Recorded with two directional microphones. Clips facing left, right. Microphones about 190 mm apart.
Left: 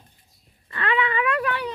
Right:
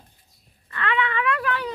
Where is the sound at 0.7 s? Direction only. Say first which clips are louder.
Left 1 dB; 30° left (ahead or behind).